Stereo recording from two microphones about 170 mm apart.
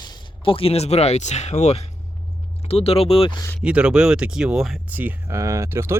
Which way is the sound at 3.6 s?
5° right (ahead or behind).